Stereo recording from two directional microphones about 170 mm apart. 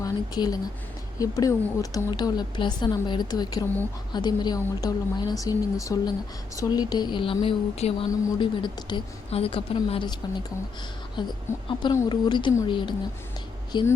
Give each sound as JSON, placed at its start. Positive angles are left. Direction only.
{"t": 0.0, "sound": "a woman's voice", "side_deg": 20}
{"t": 11.2, "sound": "a woman's voice", "side_deg": 25}